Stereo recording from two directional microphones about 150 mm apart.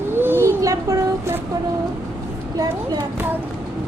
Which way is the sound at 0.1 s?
15° right (ahead or behind).